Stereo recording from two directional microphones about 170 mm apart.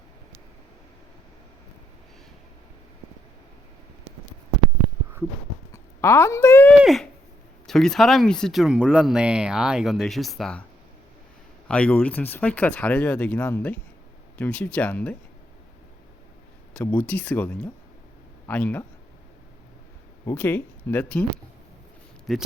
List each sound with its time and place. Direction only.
5.7 s speech: 15° left (ahead or behind)
6.8 s a sound: centre (ahead or behind)
7.7 s speech: centre (ahead or behind)
11.7 s speech: 10° left (ahead or behind)
16.7 s speech: 10° left (ahead or behind)
20.2 s speech: 10° left (ahead or behind)
22.3 s speech: centre (ahead or behind)